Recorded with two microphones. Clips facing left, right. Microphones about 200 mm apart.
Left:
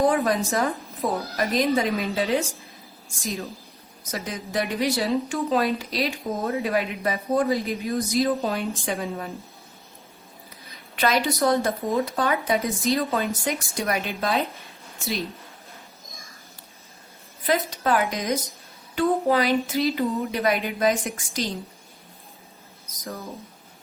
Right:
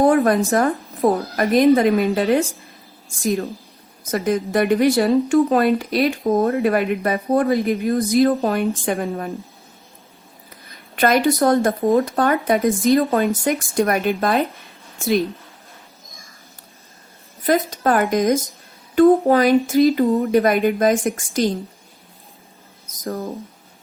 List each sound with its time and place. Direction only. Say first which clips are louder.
0.0 s speech: right 6 dB; 55° right (ahead or behind)
4.1 s speech: right 10 dB; 55° right (ahead or behind)
10.7 s speech: right 6 dB; 50° right (ahead or behind)
17.4 s speech: right 6 dB; 45° right (ahead or behind)